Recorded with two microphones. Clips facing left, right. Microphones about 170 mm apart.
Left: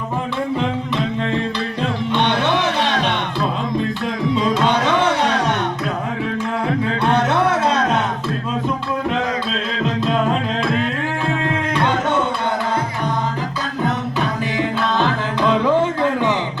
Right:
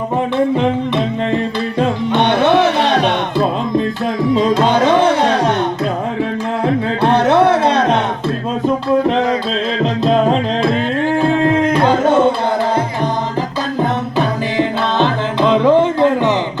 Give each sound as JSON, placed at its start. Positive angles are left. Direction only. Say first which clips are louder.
{"t": 1.8, "sound": "music", "louder": "right 5 dB", "side_deg": -50}
{"t": 4.5, "sound": "music", "louder": "right 5 dB", "side_deg": -35}
{"t": 7.0, "sound": "music", "louder": "right 7 dB", "side_deg": -30}
{"t": 14.9, "sound": "music", "louder": "right 4 dB", "side_deg": -25}